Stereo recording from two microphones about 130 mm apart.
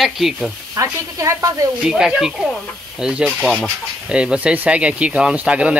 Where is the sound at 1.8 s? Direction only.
5° right (ahead or behind).